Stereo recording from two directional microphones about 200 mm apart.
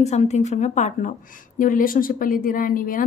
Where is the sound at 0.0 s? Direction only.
35° left (ahead or behind).